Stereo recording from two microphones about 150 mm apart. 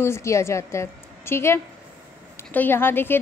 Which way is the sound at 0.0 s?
20° left (ahead or behind).